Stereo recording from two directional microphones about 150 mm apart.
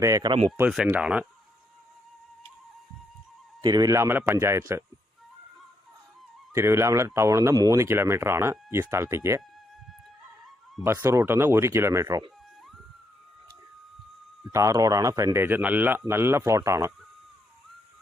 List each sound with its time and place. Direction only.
0.0 s speech: 25° right (ahead or behind)
0.9 s speech: 10° right (ahead or behind)
3.6 s speech: 30° right (ahead or behind)
6.5 s speech: 20° right (ahead or behind)
10.8 s speech: 15° right (ahead or behind)
14.5 s speech: 20° right (ahead or behind)